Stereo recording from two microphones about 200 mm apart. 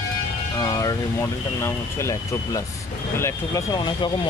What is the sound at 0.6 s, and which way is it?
Speech, 15° left (ahead or behind).